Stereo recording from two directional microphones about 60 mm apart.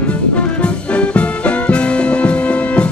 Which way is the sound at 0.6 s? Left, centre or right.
Left.